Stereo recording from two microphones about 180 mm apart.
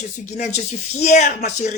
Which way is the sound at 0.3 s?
40° left (ahead or behind).